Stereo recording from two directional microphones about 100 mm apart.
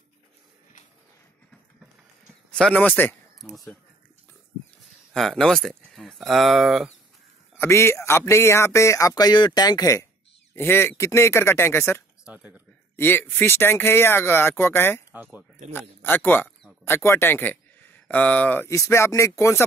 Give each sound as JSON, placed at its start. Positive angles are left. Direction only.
{"t": 2.5, "sound": "speech", "side_deg": 10}
{"t": 3.3, "sound": "speech", "side_deg": 0}
{"t": 5.1, "sound": "speech", "side_deg": 5}
{"t": 7.5, "sound": "speech", "side_deg": 25}
{"t": 10.5, "sound": "speech", "side_deg": 20}
{"t": 12.3, "sound": "a sound", "side_deg": -15}
{"t": 12.9, "sound": "speech", "side_deg": 20}
{"t": 18.7, "sound": "speech", "side_deg": 30}